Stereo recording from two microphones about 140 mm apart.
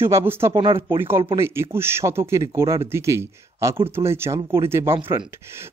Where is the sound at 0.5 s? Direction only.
35° right (ahead or behind).